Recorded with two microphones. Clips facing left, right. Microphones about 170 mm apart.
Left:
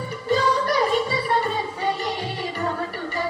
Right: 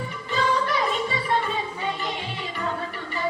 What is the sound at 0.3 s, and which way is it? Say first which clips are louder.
Music: left 4 dB; 40° left (ahead or behind).